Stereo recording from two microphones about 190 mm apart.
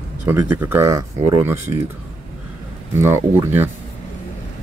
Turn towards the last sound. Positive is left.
turn(degrees=-10)  # may be behind; listen again after turning